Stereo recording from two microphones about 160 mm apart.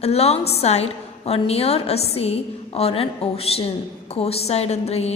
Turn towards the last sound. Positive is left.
turn(degrees=40)  # may be behind; listen again after turning